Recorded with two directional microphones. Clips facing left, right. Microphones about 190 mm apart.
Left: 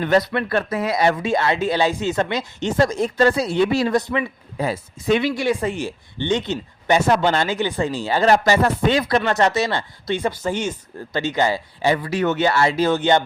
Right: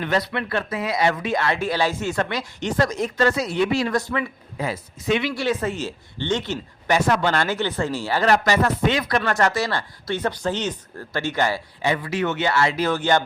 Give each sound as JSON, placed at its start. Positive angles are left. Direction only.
{"t": 0.0, "sound": "speech", "side_deg": 45}
{"t": 1.2, "sound": "speech", "side_deg": 25}
{"t": 3.9, "sound": "speech", "side_deg": 20}
{"t": 4.5, "sound": "speech", "side_deg": 35}
{"t": 5.3, "sound": "speech", "side_deg": 15}
{"t": 11.8, "sound": "speech", "side_deg": 35}